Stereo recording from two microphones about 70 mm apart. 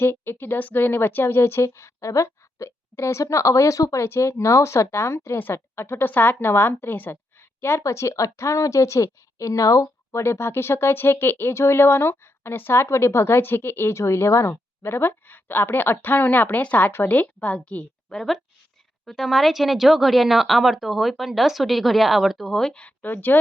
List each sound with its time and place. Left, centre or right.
0.0 s a woman's voice: left
7.8 s a woman's voice: left; by 22.7 s centre
22.7 s speech: centre